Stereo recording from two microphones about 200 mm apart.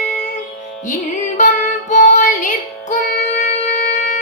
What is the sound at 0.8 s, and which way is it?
Music, 40° left (ahead or behind).